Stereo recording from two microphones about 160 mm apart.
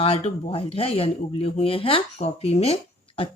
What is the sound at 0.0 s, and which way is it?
Speech, 40° left (ahead or behind).